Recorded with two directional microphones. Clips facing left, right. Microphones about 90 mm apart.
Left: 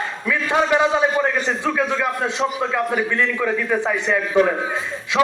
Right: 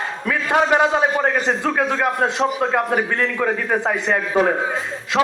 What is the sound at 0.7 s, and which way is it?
A man's voice, 50° right (ahead or behind).